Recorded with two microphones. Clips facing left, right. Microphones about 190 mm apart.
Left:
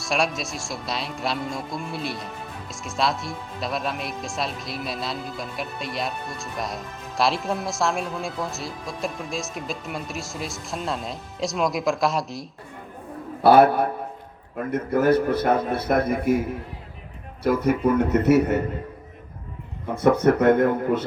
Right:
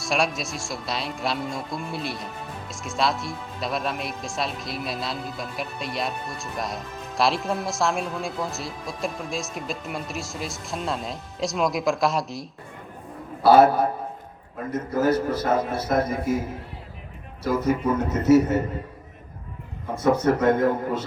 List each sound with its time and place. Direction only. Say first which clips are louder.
0.0 s speech: even; centre (ahead or behind)
13.4 s a man's voice: even; 60° left (ahead or behind)
17.4 s a man's voice: left 2 dB; 60° left (ahead or behind)
20.0 s a man's voice: left 2 dB; 60° left (ahead or behind)